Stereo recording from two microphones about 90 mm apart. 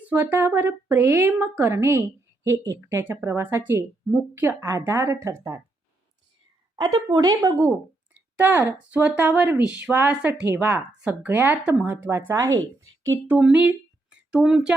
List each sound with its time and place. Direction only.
0.1 s a woman's voice: 25° right (ahead or behind)
7.1 s a woman's voice: 45° right (ahead or behind)
8.4 s speech: 20° right (ahead or behind)
11.0 s speech: 15° right (ahead or behind)
12.1 s a woman's voice: 30° right (ahead or behind)
13.2 s speech: 15° right (ahead or behind)